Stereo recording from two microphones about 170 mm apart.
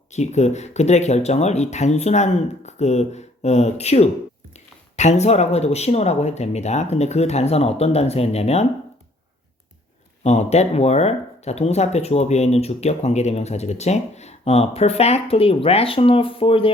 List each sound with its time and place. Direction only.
0.1 s speech: 40° left (ahead or behind)
10.2 s speech: 40° left (ahead or behind)